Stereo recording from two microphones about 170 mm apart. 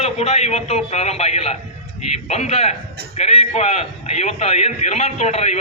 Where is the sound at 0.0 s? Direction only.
40° left (ahead or behind).